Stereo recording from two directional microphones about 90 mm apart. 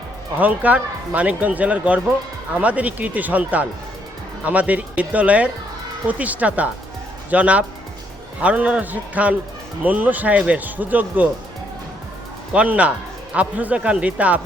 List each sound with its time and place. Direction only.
0.3 s speech: 15° right (ahead or behind)
12.5 s speech: 15° right (ahead or behind)